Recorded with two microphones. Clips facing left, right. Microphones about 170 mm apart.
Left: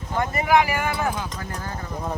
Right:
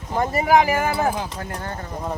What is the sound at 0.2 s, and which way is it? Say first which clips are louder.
Speech: right 2 dB; 40° right (ahead or behind).